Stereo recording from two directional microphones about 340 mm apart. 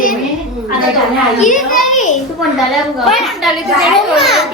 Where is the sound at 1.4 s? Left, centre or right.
Left.